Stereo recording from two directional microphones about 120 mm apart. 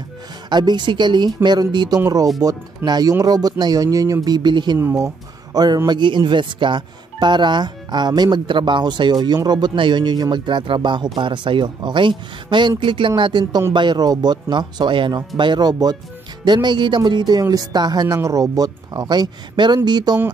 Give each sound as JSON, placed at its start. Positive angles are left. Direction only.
{"t": 0.5, "sound": "speech", "side_deg": -40}
{"t": 4.7, "sound": "speech", "side_deg": -20}